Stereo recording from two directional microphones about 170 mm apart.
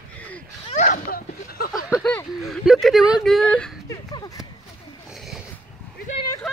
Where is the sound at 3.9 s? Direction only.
20° left (ahead or behind).